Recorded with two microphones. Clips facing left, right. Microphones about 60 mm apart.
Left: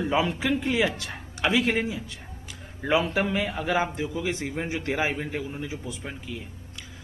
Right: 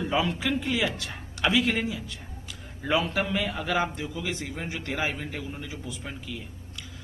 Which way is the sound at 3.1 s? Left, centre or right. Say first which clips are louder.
Left 2 dB; centre.